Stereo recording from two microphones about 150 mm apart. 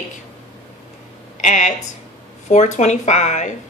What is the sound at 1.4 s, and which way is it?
Speech, 55° left (ahead or behind).